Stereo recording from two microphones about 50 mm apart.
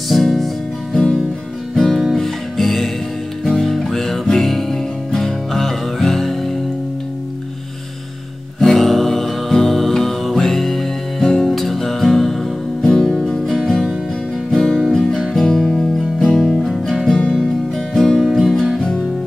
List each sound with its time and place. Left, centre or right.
0.1 s music: centre
1.8 s music: centre
8.5 s music: centre
16.4 s guitar: centre
17.2 s music: centre